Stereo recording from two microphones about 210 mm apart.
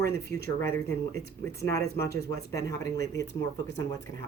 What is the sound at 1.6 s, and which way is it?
Speech, 15° left (ahead or behind).